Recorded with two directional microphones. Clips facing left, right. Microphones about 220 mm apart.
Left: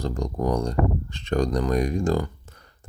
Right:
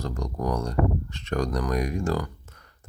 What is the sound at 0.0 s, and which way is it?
Speech, 30° left (ahead or behind).